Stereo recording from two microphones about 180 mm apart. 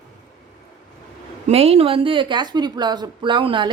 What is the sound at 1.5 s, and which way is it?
A woman's voice, 35° right (ahead or behind).